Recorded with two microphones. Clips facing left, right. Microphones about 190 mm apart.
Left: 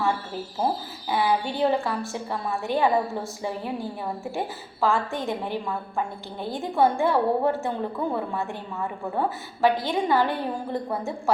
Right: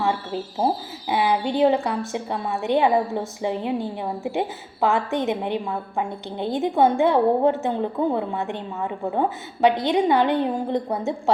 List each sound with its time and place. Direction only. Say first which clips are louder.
0.0 s a woman's voice: right 2 dB; 20° right (ahead or behind)